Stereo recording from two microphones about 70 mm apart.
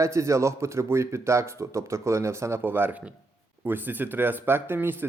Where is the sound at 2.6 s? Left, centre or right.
Right.